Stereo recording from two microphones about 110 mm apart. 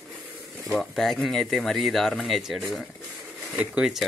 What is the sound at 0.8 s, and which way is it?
Speech, 5° left (ahead or behind).